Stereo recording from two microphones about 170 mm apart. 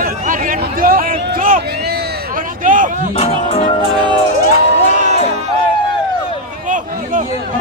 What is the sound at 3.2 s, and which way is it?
Speech, 40° left (ahead or behind).